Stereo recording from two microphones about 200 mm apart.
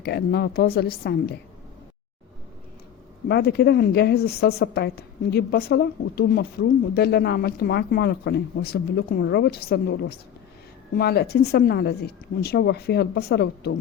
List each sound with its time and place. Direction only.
0.0 s speech: 50° left (ahead or behind)
3.2 s speech: 55° left (ahead or behind)